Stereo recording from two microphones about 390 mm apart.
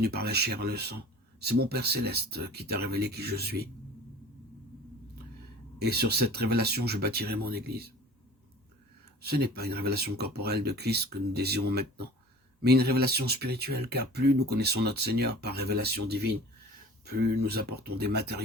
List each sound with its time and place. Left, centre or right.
0.0 s speech: right
5.8 s speech: right
9.2 s speech: right